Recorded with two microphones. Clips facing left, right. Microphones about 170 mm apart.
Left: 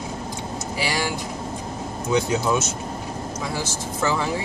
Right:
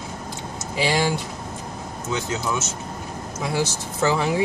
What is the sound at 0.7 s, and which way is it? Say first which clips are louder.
Speech: right 5 dB; 20° right (ahead or behind).